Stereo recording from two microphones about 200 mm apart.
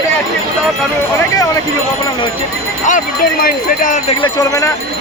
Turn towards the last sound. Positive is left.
turn(degrees=20)  # may be behind; listen again after turning